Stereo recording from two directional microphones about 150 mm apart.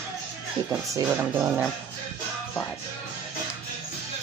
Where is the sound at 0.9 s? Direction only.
20° right (ahead or behind).